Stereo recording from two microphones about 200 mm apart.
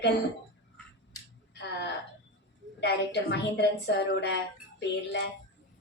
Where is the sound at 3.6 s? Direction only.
60° left (ahead or behind).